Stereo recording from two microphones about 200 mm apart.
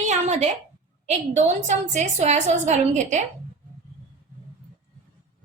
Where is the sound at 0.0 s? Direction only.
35° right (ahead or behind).